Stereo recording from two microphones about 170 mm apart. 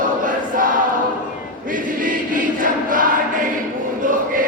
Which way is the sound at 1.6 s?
55° right (ahead or behind).